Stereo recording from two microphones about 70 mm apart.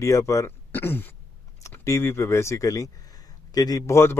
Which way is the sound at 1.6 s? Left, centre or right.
Left.